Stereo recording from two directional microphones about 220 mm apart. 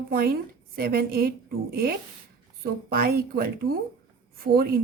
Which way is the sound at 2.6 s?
40° right (ahead or behind).